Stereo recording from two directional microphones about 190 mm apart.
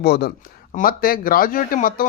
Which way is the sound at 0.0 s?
55° left (ahead or behind).